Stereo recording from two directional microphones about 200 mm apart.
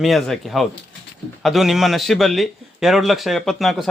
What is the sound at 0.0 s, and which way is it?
Speech, centre (ahead or behind).